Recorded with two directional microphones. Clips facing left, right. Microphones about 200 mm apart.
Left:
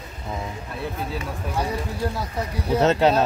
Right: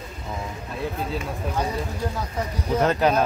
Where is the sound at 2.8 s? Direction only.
25° left (ahead or behind).